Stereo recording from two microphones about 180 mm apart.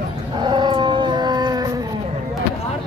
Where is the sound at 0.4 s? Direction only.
25° right (ahead or behind).